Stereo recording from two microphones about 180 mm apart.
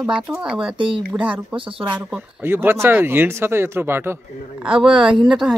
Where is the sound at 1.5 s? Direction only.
30° right (ahead or behind).